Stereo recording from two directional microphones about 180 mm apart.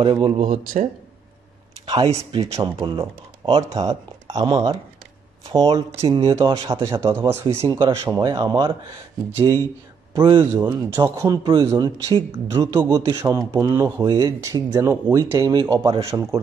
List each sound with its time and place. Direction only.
0.0 s speech: 30° right (ahead or behind)
0.4 s speech: 40° right (ahead or behind)
1.9 s speech: 30° right (ahead or behind)
3.7 s speech: 20° right (ahead or behind)
6.3 s speech: 20° right (ahead or behind)
10.1 s speech: 25° right (ahead or behind)